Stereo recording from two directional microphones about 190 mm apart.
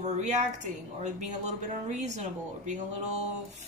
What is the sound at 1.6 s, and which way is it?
Speech, 40° right (ahead or behind).